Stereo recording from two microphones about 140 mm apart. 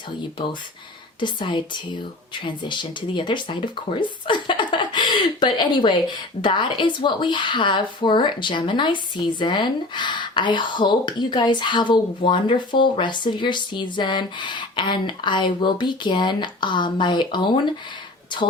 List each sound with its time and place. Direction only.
1.2 s speech: 35° left (ahead or behind)